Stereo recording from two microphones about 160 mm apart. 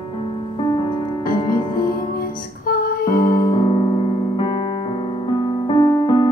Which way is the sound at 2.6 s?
70° left (ahead or behind).